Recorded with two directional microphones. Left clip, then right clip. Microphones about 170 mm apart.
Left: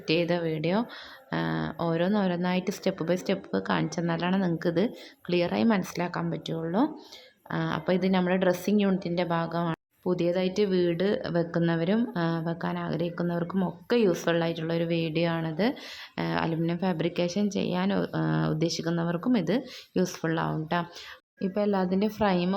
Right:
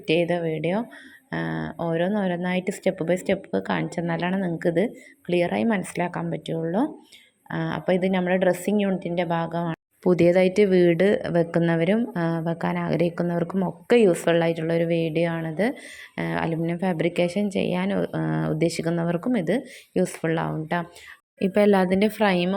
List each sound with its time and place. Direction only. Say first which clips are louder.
0.1 s speech: right 4 dB; 5° right (ahead or behind)
10.0 s speech: right 9 dB; 30° right (ahead or behind); by 20.8 s 10° right (ahead or behind)
21.3 s speech: right 8 dB; 20° right (ahead or behind)